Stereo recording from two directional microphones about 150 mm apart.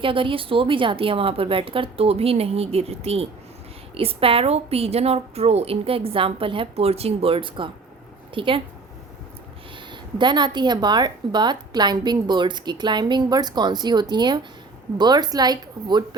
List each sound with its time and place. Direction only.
0.0 s a woman's voice: 35° right (ahead or behind)
9.9 s speech: 30° right (ahead or behind)